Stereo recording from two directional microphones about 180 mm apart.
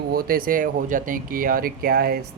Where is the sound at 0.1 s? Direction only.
55° right (ahead or behind).